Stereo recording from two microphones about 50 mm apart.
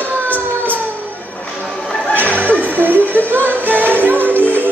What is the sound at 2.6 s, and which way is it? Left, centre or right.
Music, right.